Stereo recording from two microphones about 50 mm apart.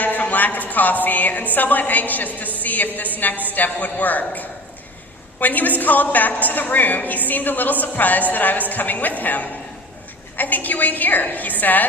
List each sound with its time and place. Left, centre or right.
0.0 s a woman's voice: left